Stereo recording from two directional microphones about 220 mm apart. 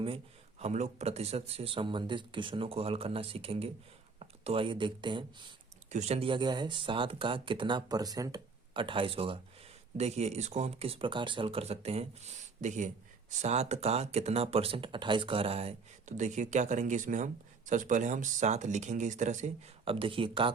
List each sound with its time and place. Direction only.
0.6 s speech: 30° right (ahead or behind)